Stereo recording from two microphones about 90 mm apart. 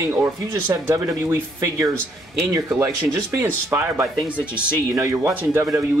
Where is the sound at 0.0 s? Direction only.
25° right (ahead or behind).